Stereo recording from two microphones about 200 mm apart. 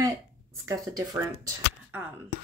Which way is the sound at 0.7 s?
15° right (ahead or behind).